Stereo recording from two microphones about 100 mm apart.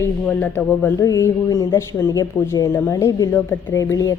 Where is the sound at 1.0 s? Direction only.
35° left (ahead or behind).